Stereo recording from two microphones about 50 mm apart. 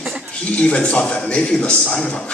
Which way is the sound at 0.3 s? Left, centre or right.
Left.